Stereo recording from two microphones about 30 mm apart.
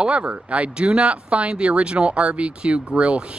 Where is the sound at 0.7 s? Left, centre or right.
Right.